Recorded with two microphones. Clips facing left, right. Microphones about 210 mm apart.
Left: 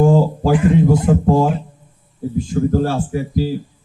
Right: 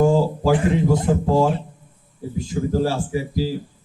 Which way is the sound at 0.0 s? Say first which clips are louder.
Left 3 dB; 55° left (ahead or behind).